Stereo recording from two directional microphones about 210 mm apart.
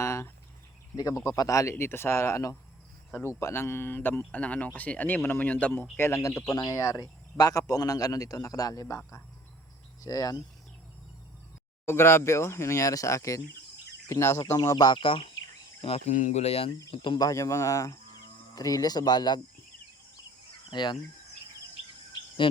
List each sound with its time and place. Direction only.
0.0 s a sound: 15° left (ahead or behind)
0.9 s speech: 15° left (ahead or behind)
11.9 s speech: 10° left (ahead or behind)
20.7 s speech: 20° left (ahead or behind)